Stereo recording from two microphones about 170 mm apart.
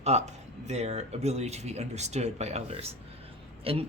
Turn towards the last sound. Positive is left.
turn(degrees=-35)  # may be behind; listen again after turning